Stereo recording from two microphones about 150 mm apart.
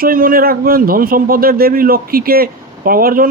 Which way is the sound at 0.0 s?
70° right (ahead or behind).